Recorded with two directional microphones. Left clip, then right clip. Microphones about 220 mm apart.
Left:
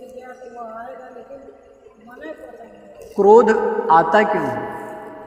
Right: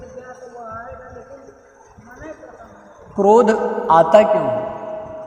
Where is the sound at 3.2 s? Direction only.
45° right (ahead or behind).